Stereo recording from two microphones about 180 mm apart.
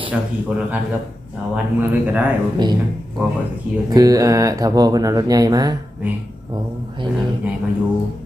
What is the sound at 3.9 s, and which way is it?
Speech, 20° right (ahead or behind).